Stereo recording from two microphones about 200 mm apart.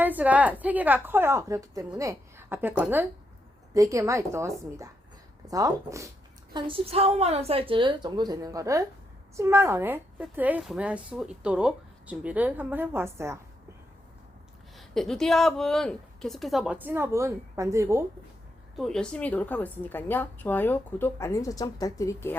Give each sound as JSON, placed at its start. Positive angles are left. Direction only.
{"t": 0.0, "sound": "a woman's voice", "side_deg": -10}
{"t": 14.8, "sound": "a woman's voice", "side_deg": 0}
{"t": 18.8, "sound": "a woman's voice", "side_deg": 0}